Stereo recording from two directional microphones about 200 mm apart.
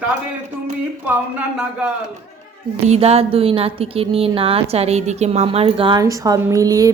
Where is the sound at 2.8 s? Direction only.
30° right (ahead or behind).